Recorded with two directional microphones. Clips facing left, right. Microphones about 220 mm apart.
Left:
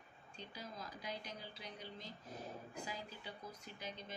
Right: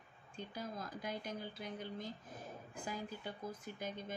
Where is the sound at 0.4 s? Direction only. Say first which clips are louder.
Right 6 dB; 50° right (ahead or behind).